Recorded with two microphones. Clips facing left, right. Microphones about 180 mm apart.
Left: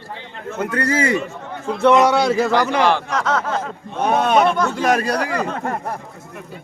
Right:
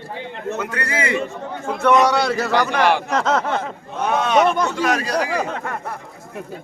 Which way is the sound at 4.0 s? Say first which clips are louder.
Left 1 dB; 45° left (ahead or behind).